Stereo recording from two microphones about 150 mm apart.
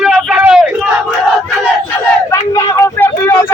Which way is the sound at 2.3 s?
20° left (ahead or behind).